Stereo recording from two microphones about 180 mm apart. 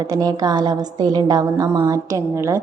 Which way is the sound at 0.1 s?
20° right (ahead or behind).